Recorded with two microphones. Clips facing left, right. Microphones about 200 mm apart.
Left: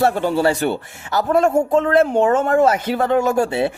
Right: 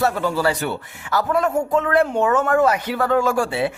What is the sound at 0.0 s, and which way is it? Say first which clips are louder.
Speech: left 3 dB; 30° left (ahead or behind).